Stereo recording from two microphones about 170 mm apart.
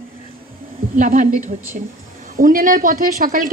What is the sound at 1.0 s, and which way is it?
Speech, 50° right (ahead or behind).